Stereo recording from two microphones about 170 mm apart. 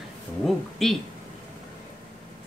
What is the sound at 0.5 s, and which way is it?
Speech, centre (ahead or behind).